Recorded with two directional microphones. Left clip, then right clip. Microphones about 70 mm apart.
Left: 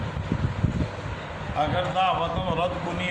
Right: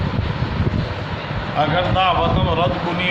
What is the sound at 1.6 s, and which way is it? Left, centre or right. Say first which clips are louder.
A man's voice: right 6 dB; left.